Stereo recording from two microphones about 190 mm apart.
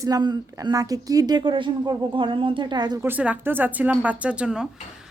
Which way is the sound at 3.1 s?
10° right (ahead or behind).